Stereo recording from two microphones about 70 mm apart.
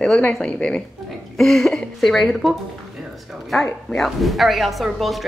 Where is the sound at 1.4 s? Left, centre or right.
Centre.